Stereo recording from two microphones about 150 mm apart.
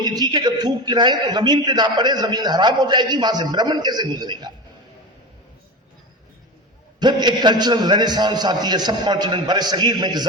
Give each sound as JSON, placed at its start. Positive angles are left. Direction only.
{"t": 0.0, "sound": "a man's voice", "side_deg": -25}
{"t": 7.0, "sound": "a man's voice", "side_deg": -30}